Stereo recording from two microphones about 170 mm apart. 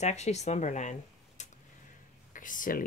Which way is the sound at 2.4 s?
50° left (ahead or behind).